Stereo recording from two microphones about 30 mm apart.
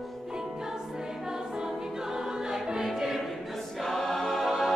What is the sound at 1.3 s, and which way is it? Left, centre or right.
Choir, right.